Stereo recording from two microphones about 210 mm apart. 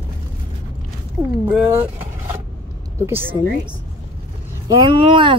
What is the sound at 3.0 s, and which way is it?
Speech, 10° right (ahead or behind).